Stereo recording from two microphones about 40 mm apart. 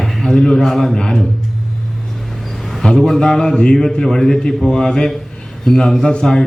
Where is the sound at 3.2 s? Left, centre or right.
Centre.